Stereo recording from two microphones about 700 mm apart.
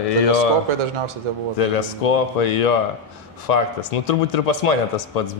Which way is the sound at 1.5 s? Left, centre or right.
Left.